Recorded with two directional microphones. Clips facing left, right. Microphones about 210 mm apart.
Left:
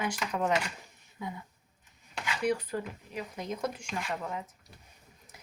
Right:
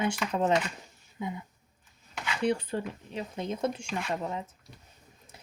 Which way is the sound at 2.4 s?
25° right (ahead or behind).